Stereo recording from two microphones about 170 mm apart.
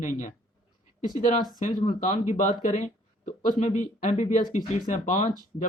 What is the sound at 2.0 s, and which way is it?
Speech, 50° left (ahead or behind).